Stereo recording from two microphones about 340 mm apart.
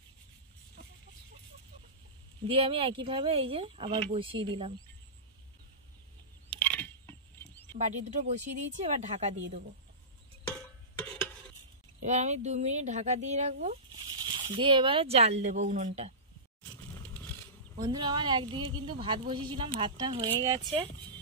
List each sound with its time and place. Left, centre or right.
2.4 s speech: centre
6.6 s a sound: centre
7.7 s speech: right
10.5 s stir: centre
12.0 s speech: centre
17.0 s pulleys: centre
17.7 s speech: centre